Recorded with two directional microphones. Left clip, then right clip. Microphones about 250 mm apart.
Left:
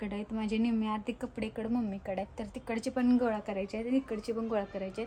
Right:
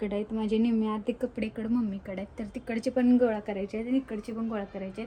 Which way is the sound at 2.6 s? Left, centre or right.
Left.